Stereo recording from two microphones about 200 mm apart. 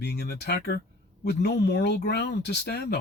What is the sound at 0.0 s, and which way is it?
Speech, 55° left (ahead or behind).